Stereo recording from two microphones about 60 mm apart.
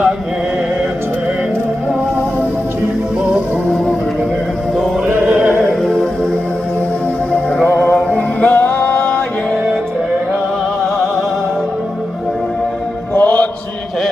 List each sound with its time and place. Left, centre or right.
5.1 s music: right
5.8 s music: centre
7.6 s music: left
13.1 s music: left